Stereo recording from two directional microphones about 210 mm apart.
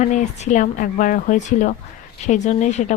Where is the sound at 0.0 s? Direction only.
35° left (ahead or behind).